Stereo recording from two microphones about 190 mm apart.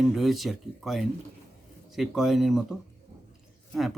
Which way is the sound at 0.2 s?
Centre (ahead or behind).